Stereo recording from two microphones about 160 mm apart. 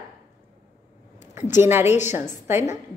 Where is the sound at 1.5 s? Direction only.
15° right (ahead or behind).